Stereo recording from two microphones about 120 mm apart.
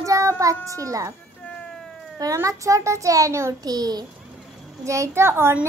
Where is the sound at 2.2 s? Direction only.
25° right (ahead or behind).